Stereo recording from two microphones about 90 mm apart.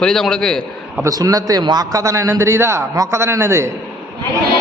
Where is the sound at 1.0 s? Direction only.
40° right (ahead or behind).